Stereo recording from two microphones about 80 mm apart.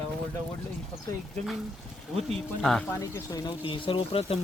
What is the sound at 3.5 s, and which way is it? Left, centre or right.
Speech, left.